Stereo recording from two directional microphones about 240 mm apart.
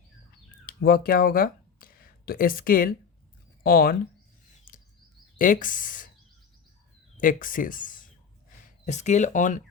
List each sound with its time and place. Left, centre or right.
0.6 s speech: left
4.7 s bird vocalization: left
5.4 s speech: left
7.2 s speech: left